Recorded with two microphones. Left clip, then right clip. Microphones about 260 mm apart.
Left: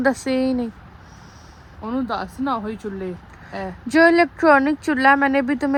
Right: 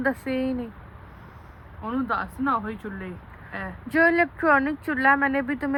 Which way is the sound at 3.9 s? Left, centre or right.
Left.